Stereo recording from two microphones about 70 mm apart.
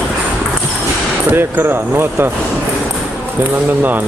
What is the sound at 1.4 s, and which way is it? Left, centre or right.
Speech, right.